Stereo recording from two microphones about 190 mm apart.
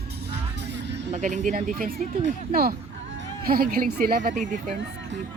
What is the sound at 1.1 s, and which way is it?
Speech, 40° right (ahead or behind).